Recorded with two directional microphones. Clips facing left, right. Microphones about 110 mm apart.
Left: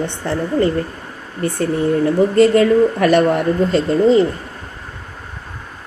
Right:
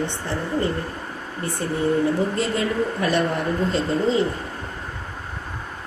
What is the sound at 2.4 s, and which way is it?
Speech, 65° left (ahead or behind).